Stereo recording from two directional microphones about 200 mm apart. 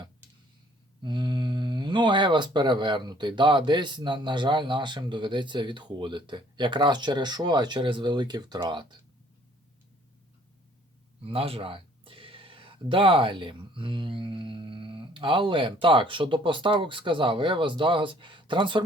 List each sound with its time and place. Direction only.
1.0 s speech: 20° right (ahead or behind)
11.2 s speech: 30° right (ahead or behind)